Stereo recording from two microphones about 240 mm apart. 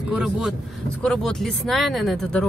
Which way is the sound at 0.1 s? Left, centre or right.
Centre.